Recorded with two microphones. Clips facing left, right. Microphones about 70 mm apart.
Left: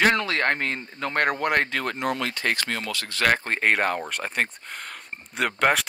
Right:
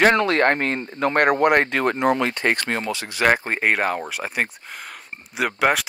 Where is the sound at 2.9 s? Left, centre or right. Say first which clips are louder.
Right 4 dB; centre.